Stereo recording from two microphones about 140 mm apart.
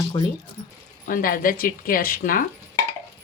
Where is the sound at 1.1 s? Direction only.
90° left.